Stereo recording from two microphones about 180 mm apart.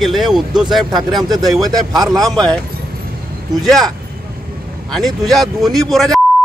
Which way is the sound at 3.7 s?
Centre (ahead or behind).